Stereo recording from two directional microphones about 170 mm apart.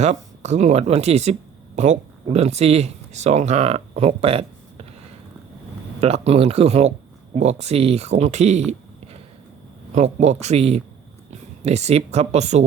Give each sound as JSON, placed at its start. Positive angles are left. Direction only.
{"t": 0.0, "sound": "speech", "side_deg": -40}
{"t": 6.0, "sound": "speech", "side_deg": -35}
{"t": 9.9, "sound": "speech", "side_deg": -40}